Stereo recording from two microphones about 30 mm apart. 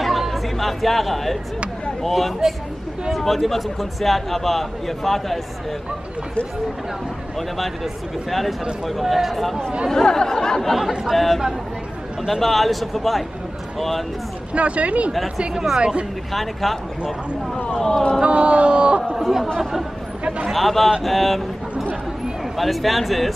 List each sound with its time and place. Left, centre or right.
0.0 s chatter: centre
2.0 s a man's voice: centre
7.3 s a man's voice: centre
10.0 s speech: centre
11.1 s a man's voice: centre
14.5 s speech: right
15.8 s speech: right
16.6 s a man's voice: centre
17.7 s speech: centre
18.2 s speech: right
19.1 s speech: centre
20.5 s a man's voice: centre
22.6 s a man's voice: centre